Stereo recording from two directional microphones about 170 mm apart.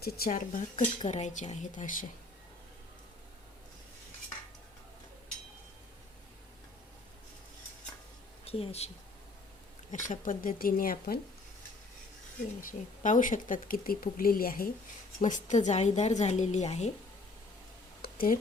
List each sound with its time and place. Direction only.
0.0 s speech: 65° left (ahead or behind)
0.3 s speech: 50° left (ahead or behind)
8.4 s speech: 35° left (ahead or behind)
9.9 s speech: 50° left (ahead or behind)
12.6 s speech: 50° left (ahead or behind)
15.2 s speech: 45° left (ahead or behind)
18.0 s a sound: 55° left (ahead or behind)